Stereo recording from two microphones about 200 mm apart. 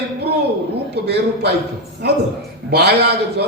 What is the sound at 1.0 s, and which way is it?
Speech, 55° right (ahead or behind).